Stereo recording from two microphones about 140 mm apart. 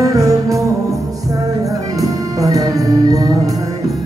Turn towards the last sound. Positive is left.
turn(degrees=-25)  # may be behind; listen again after turning